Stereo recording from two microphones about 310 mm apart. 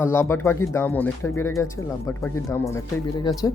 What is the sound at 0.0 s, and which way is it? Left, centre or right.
Speech, centre.